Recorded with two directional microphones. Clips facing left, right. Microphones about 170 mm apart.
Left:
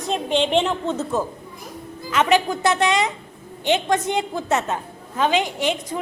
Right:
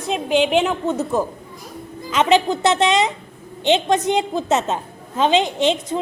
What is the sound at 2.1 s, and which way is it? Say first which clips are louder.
A woman's voice: right 2 dB; 20° right (ahead or behind).